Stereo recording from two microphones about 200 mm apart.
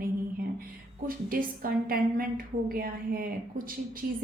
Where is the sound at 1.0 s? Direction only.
45° right (ahead or behind).